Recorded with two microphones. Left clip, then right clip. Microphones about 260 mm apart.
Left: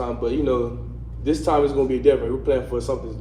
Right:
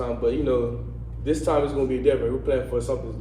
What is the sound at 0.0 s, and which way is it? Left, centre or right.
A man's voice, left.